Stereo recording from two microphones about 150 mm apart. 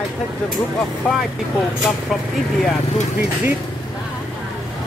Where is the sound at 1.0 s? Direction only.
5° left (ahead or behind).